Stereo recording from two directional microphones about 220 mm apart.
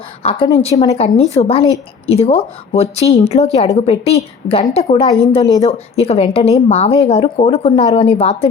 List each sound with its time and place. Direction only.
0.3 s speech: 20° left (ahead or behind)